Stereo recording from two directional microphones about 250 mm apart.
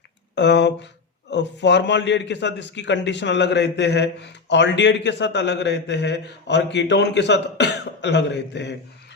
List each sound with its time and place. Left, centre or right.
0.3 s a man's voice: left